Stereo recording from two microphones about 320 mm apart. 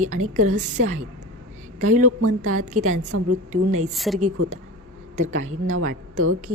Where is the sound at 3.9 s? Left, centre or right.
Centre.